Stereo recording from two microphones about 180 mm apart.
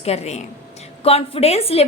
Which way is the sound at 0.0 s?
35° left (ahead or behind).